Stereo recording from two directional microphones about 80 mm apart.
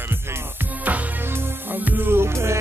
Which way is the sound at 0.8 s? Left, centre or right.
Right.